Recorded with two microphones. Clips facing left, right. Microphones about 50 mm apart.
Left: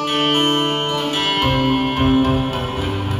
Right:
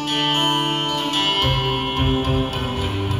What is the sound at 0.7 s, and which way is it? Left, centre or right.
Music, centre.